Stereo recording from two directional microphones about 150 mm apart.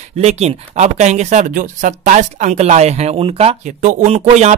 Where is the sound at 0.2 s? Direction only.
45° right (ahead or behind).